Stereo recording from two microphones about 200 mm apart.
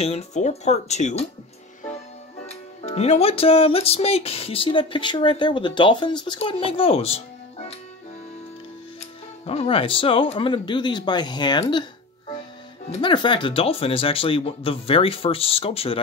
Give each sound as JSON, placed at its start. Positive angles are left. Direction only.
{"t": 0.0, "sound": "speech", "side_deg": 35}
{"t": 2.4, "sound": "speech", "side_deg": 30}
{"t": 9.5, "sound": "speech", "side_deg": 30}
{"t": 12.9, "sound": "speech", "side_deg": 25}